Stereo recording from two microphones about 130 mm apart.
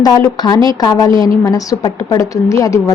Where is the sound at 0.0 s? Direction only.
30° left (ahead or behind).